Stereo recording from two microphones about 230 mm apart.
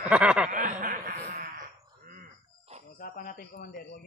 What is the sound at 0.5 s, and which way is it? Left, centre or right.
Wail, right.